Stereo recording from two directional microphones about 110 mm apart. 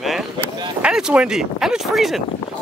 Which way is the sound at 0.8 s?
5° right (ahead or behind).